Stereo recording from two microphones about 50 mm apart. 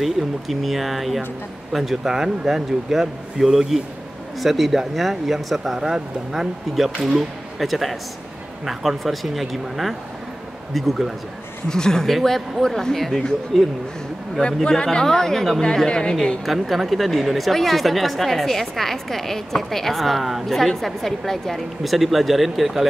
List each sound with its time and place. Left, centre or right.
0.0 s a man's voice: centre
11.7 s speech: centre
14.4 s speech: centre
16.4 s speech: centre